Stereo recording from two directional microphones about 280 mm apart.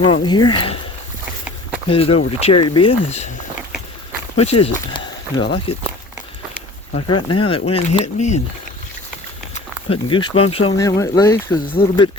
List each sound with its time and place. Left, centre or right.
0.0 s speech: centre
1.9 s speech: centre
4.4 s speech: left
6.9 s speech: centre
9.6 s speech: centre